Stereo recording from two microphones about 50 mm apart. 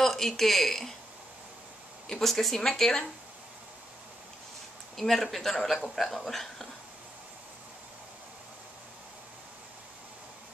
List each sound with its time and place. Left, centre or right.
0.0 s speech: centre
2.0 s speech: centre
4.9 s speech: centre